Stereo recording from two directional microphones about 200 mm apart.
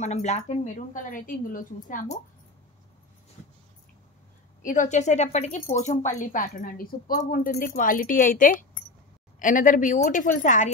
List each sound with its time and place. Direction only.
0.0 s speech: 35° left (ahead or behind)
4.6 s speech: 40° left (ahead or behind)